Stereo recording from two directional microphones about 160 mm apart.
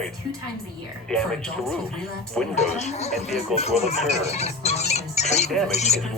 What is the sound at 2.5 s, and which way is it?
Speech, 45° left (ahead or behind).